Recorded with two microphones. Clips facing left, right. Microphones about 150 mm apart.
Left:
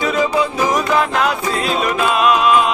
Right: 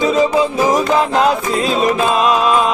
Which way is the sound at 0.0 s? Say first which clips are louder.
Right 3 dB; 25° right (ahead or behind).